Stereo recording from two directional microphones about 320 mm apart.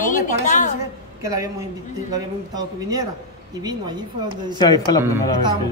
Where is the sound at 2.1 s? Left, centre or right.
Centre.